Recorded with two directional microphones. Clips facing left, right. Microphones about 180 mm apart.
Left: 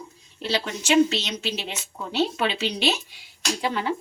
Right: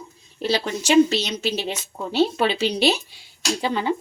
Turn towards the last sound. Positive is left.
turn(degrees=-25)  # may be behind; listen again after turning